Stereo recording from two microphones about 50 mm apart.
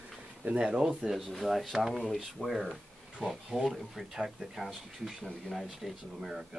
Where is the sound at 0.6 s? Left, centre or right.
Centre.